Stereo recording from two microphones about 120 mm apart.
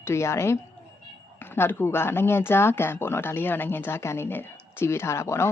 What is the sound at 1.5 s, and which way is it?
Speech, 20° left (ahead or behind).